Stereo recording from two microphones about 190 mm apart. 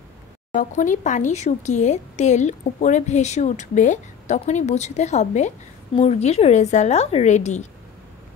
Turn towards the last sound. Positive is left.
turn(degrees=40)  # may be behind; listen again after turning